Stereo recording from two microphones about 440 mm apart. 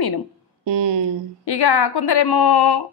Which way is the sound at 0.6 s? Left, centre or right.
Right.